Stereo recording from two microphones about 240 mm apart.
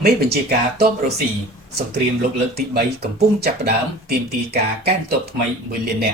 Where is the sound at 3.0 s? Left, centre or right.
Right.